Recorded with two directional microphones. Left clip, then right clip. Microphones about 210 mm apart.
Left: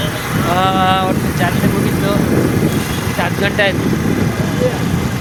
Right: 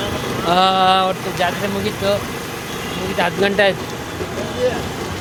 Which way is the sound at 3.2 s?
15° right (ahead or behind).